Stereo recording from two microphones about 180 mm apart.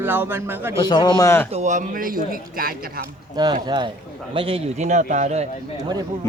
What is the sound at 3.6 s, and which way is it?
A man's voice, 25° right (ahead or behind).